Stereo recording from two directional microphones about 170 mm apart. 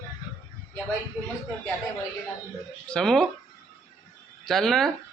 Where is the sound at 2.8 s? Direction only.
5° left (ahead or behind).